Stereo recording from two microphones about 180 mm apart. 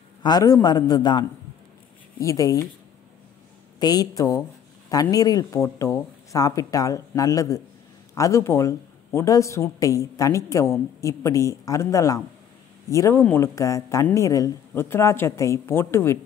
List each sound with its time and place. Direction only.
0.2 s speech: 20° left (ahead or behind)
3.8 s speech: 20° left (ahead or behind)